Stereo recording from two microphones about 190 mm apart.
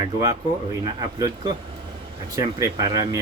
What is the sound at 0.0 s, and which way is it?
Speech, 20° right (ahead or behind).